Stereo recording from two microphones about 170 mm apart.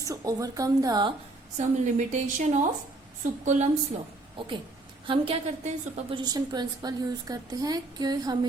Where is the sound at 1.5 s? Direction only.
45° right (ahead or behind).